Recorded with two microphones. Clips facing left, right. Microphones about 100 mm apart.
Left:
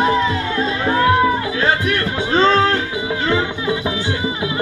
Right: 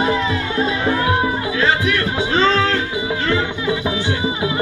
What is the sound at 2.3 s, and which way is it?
Music, 35° left (ahead or behind).